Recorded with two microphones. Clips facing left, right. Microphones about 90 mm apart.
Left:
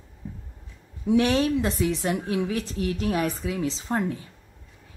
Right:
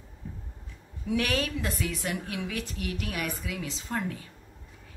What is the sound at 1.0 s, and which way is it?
A woman's voice, 25° left (ahead or behind).